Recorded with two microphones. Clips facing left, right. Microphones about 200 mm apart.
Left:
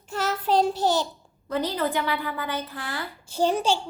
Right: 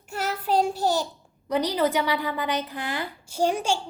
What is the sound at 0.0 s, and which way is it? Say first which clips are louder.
Child singing: left 2 dB; 10° right (ahead or behind).